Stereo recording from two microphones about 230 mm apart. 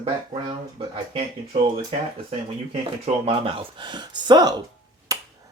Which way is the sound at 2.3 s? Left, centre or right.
Right.